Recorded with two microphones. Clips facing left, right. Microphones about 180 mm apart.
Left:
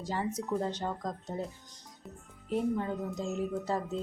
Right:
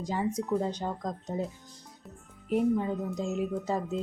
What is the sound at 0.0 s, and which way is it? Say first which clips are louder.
Speech: right 3 dB; 15° right (ahead or behind).